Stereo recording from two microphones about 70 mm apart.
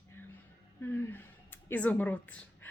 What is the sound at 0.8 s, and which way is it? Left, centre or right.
A woman's voice, left.